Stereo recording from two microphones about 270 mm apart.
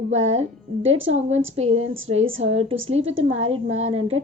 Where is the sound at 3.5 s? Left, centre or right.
Right.